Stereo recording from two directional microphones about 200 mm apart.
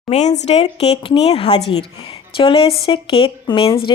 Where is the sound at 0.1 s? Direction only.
35° left (ahead or behind).